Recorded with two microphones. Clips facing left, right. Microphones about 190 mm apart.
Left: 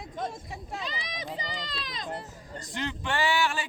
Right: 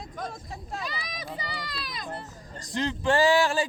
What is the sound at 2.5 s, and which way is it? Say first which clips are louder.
A man's voice: right 5 dB; 40° right (ahead or behind).